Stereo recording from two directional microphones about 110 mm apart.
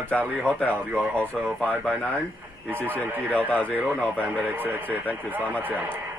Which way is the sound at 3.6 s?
15° right (ahead or behind).